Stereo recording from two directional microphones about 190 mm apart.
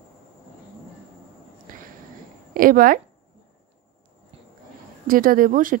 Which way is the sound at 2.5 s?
50° right (ahead or behind).